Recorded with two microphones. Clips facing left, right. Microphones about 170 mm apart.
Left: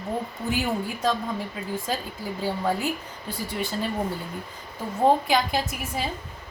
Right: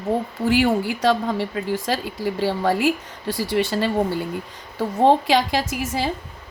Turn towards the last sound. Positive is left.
turn(degrees=-85)